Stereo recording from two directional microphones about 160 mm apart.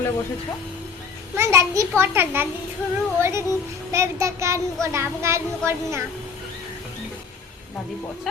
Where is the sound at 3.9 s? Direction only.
20° right (ahead or behind).